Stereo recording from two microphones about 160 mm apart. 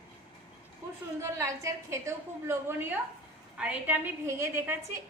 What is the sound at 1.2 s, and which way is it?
A woman's voice, 15° right (ahead or behind).